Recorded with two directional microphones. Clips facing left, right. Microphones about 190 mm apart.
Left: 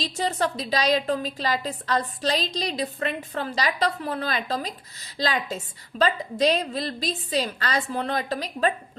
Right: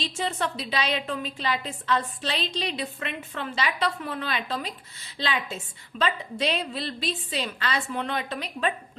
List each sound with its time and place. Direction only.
0.0 s a woman's voice: 40° left (ahead or behind)